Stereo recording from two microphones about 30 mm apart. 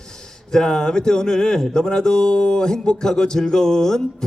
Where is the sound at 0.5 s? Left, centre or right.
Left.